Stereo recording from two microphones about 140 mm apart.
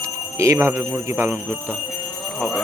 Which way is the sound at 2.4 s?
Centre (ahead or behind).